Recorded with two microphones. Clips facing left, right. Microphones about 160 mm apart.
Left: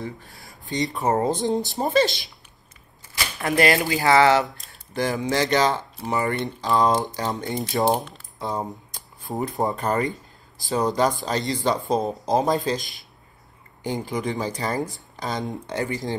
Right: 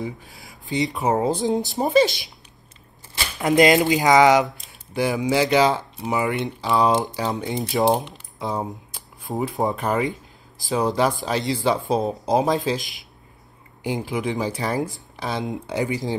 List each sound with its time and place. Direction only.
0.2 s speech: centre (ahead or behind)
3.3 s speech: 20° right (ahead or behind)